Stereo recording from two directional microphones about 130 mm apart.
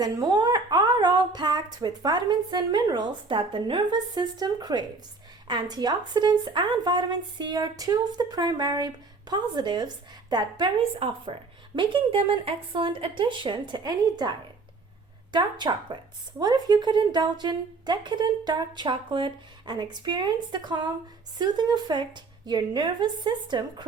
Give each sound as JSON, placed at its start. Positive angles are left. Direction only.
{"t": 0.0, "sound": "a woman's voice", "side_deg": -30}